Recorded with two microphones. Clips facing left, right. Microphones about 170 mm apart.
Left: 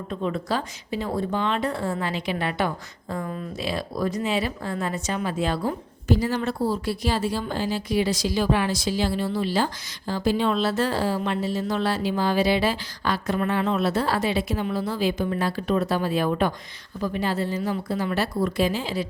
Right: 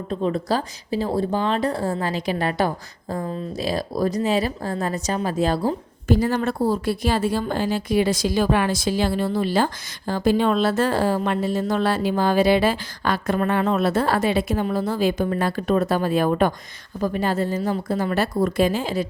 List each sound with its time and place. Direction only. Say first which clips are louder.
0.1 s a woman's voice: right 4 dB; 35° right (ahead or behind)
6.1 s speech: right 3 dB; 50° right (ahead or behind)